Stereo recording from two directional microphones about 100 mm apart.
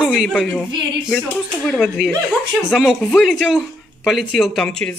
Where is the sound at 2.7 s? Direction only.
Centre (ahead or behind).